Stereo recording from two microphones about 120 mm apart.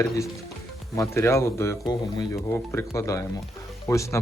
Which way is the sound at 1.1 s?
20° left (ahead or behind).